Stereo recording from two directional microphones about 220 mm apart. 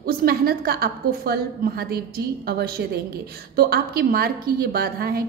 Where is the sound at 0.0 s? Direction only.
45° right (ahead or behind).